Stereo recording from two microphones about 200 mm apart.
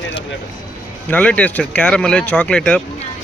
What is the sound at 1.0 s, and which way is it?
Speech, 5° left (ahead or behind).